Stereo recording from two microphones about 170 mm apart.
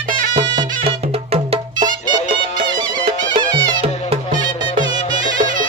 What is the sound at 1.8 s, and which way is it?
Music, 25° right (ahead or behind).